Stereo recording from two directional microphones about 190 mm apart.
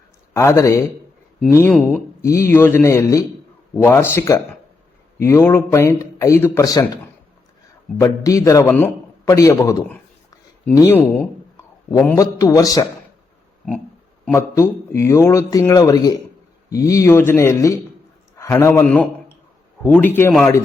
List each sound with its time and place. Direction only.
0.3 s a man's voice: 15° left (ahead or behind)
14.3 s a man's voice: 15° left (ahead or behind)